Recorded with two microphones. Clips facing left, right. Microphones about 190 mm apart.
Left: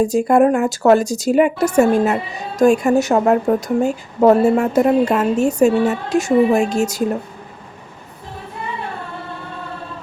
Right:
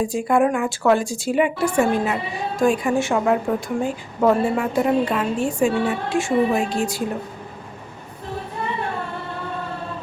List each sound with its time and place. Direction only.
0.0 s a woman's voice: 40° left (ahead or behind)